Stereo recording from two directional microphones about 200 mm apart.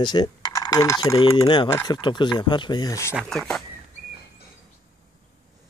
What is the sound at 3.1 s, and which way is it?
Speech, centre (ahead or behind).